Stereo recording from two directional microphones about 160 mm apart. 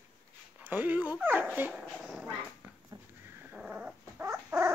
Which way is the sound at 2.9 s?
30° right (ahead or behind).